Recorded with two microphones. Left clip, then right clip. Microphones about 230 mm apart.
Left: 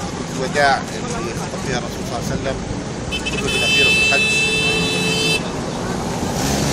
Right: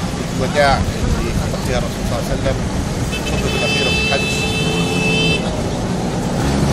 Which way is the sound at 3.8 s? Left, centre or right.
Left.